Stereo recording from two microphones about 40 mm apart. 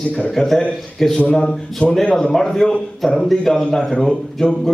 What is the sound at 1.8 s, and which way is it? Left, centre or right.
Speech, left.